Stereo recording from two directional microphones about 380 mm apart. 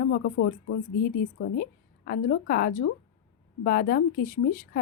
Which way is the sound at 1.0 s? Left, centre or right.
Left.